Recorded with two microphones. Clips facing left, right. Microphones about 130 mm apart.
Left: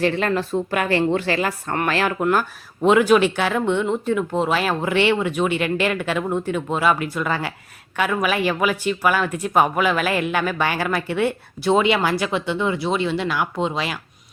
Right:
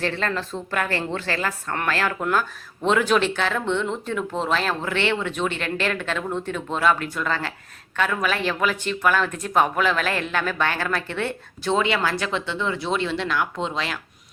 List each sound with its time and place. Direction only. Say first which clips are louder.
0.0 s speech: left 5 dB; 15° left (ahead or behind)